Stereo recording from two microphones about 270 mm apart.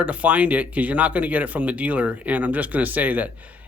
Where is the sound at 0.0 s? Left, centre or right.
Centre.